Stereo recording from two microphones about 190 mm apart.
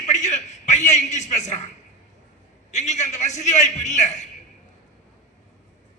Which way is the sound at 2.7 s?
40° left (ahead or behind).